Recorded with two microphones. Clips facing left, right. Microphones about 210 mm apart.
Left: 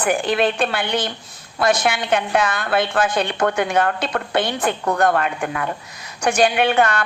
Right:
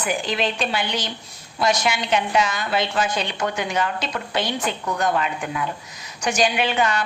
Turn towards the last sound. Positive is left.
turn(degrees=55)  # may be behind; listen again after turning